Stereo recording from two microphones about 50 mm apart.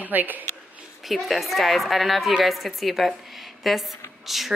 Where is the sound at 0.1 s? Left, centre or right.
Right.